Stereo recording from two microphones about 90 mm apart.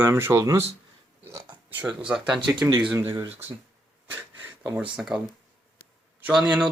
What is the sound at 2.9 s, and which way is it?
Speech, 35° right (ahead or behind).